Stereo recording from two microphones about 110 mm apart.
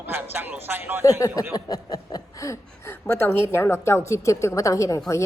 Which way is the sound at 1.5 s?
35° left (ahead or behind).